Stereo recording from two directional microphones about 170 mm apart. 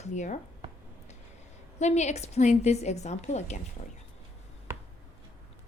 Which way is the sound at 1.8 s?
40° left (ahead or behind).